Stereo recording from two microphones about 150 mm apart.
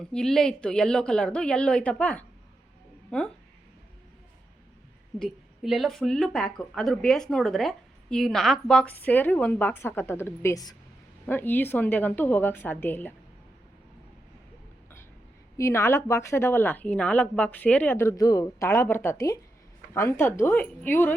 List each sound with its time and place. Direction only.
0.0 s speech: 5° left (ahead or behind)
5.2 s speech: centre (ahead or behind); by 10.8 s 25° left (ahead or behind)
11.3 s speech: 10° left (ahead or behind)
15.5 s speech: 20° left (ahead or behind)